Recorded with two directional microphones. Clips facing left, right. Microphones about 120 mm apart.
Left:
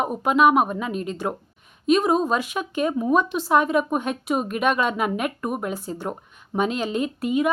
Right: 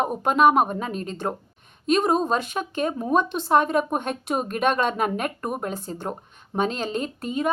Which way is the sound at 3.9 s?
40° right (ahead or behind).